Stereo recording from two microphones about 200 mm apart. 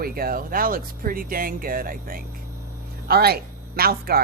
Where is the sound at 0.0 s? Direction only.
50° right (ahead or behind).